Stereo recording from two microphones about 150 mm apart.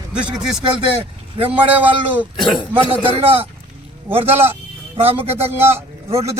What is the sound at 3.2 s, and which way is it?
A man's voice, 40° right (ahead or behind).